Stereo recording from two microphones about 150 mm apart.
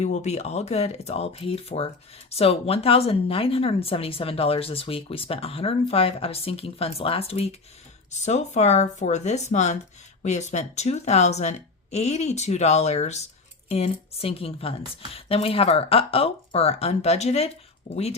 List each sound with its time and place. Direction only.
0.0 s a woman's voice: 50° left (ahead or behind)